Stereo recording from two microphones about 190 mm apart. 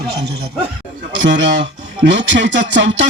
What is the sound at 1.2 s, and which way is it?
Speech, 70° right (ahead or behind).